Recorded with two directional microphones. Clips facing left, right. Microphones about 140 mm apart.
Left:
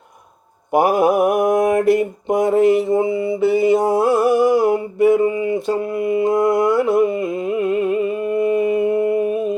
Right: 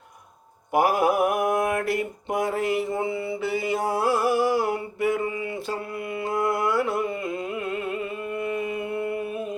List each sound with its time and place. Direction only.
0.7 s mantra: 20° left (ahead or behind)